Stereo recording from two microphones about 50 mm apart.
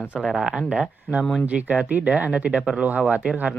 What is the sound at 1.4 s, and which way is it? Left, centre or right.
Speech, right.